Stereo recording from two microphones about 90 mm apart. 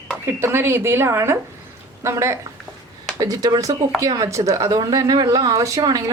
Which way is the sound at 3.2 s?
45° right (ahead or behind).